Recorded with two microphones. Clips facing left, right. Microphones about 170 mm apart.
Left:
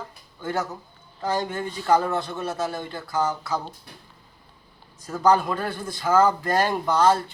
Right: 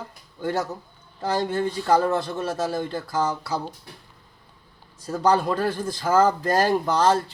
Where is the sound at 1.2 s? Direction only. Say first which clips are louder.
Right 3 dB; 35° right (ahead or behind).